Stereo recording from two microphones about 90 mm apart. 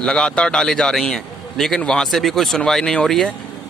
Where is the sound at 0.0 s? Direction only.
10° left (ahead or behind).